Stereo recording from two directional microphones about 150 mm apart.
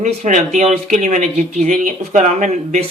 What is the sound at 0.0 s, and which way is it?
A man's voice, 55° right (ahead or behind).